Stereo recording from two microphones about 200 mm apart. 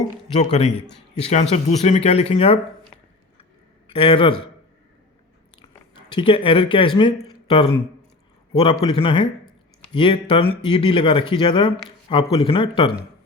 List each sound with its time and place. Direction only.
0.3 s speech: 35° left (ahead or behind)
3.8 s speech: 25° left (ahead or behind)
5.6 s speech: 25° left (ahead or behind)